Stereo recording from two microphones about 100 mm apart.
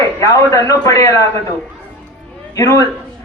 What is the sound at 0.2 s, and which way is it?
A man's voice, 30° left (ahead or behind).